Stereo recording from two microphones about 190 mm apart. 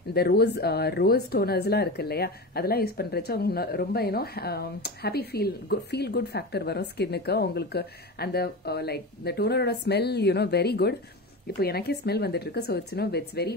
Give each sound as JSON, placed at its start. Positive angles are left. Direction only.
{"t": 0.1, "sound": "a woman's voice", "side_deg": 55}